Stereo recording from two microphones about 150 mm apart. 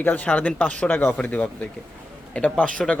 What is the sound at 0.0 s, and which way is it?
A man's voice, 10° left (ahead or behind).